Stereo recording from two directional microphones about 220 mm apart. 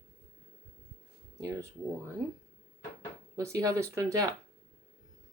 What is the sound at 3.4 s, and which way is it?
Speech, 15° right (ahead or behind).